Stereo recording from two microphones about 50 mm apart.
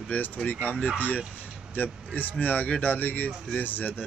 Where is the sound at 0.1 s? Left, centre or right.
Left.